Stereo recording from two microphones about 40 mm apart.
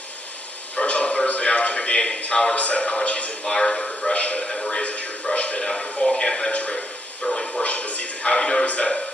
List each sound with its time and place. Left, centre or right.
0.8 s a sound: left
2.6 s a man's voice: left
3.4 s a man's voice: centre
4.1 s a man's voice: left
4.4 s speech: centre
4.7 s a man's voice: left
5.3 s a sound: left
5.5 s a man's voice: centre
6.5 s a man's voice: left
6.7 s a sound: centre
7.6 s a man's voice: left
8.3 s a man's voice: centre
8.6 s a man's voice: left